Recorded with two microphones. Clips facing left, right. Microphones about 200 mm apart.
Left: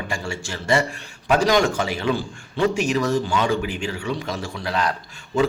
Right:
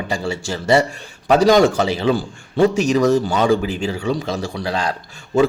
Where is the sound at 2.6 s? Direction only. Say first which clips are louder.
Right 6 dB; 40° right (ahead or behind).